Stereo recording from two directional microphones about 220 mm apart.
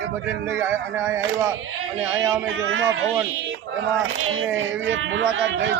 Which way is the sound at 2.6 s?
60° right (ahead or behind).